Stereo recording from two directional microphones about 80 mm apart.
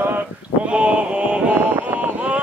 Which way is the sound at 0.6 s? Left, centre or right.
Centre.